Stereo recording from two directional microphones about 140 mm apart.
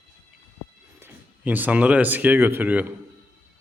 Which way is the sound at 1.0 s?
15° right (ahead or behind).